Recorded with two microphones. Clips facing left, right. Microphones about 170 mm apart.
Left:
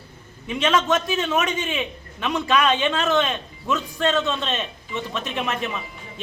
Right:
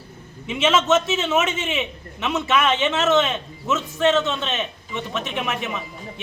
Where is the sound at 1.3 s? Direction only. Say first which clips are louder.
Right 3 dB; 5° right (ahead or behind).